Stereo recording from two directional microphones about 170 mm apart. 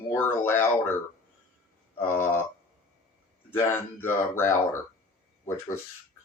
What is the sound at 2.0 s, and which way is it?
Speech, 15° left (ahead or behind).